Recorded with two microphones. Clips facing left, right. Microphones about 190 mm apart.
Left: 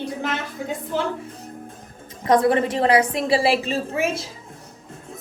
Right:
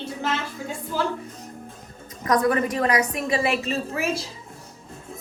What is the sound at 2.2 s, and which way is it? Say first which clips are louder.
A woman's voice: left 3 dB; 30° left (ahead or behind).